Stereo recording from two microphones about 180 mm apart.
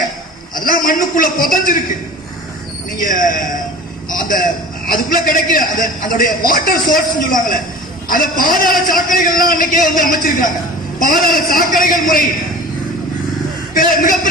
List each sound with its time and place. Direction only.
0.5 s a man's voice: 50° left (ahead or behind)
2.9 s a man's voice: 50° left (ahead or behind)
13.7 s a man's voice: 50° left (ahead or behind)